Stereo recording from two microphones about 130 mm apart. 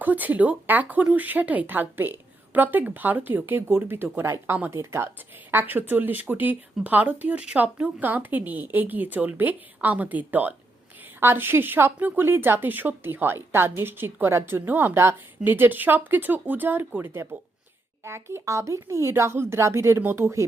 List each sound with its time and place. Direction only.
0.0 s speech: 15° right (ahead or behind)